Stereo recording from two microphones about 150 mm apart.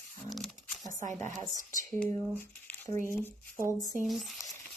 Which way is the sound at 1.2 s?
60° right (ahead or behind).